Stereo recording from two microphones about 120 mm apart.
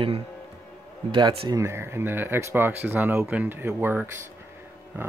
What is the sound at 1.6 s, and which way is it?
Speech, 20° right (ahead or behind).